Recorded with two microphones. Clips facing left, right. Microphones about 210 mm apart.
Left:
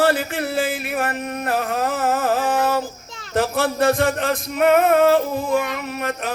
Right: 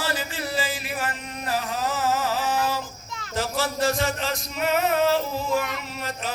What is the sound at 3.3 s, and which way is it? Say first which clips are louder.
Music: left 7 dB; 60° left (ahead or behind).